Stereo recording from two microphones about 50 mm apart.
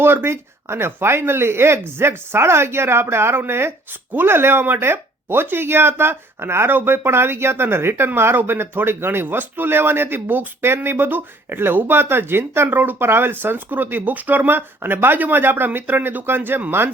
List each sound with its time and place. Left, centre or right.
0.0 s speech: right
12.6 s speech: right